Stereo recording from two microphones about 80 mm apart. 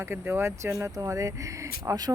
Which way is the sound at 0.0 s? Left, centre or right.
Right.